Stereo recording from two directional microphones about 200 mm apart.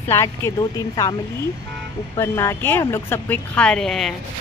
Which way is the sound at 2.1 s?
15° left (ahead or behind).